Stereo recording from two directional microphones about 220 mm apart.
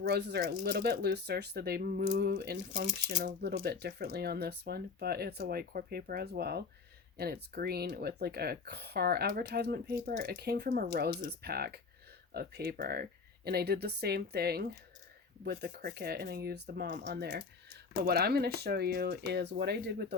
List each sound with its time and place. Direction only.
0.0 s speech: 50° right (ahead or behind)